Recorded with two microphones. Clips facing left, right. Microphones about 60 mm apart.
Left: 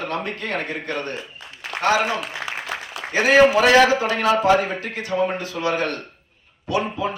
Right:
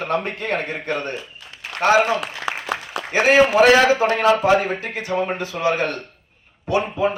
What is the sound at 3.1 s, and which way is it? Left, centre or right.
A man's voice, right.